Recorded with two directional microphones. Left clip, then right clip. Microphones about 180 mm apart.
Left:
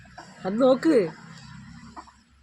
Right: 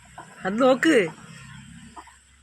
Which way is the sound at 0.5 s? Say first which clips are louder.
Right 1 dB; 20° right (ahead or behind).